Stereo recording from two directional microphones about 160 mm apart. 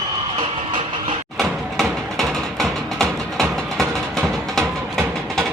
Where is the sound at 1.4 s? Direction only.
Centre (ahead or behind).